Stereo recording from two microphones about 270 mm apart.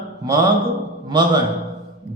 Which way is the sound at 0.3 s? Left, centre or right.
Centre.